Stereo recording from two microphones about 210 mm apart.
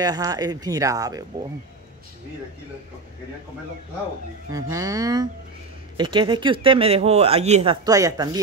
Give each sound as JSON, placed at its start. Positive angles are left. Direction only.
{"t": 0.0, "sound": "speech", "side_deg": -20}
{"t": 4.5, "sound": "speech", "side_deg": -15}